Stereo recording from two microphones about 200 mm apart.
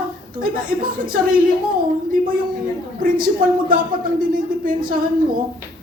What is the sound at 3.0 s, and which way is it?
Speech, 45° right (ahead or behind).